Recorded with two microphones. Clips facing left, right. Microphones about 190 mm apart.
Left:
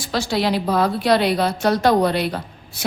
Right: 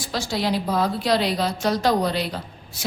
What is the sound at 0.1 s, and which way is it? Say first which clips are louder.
A woman's voice: left 4 dB; 70° left (ahead or behind).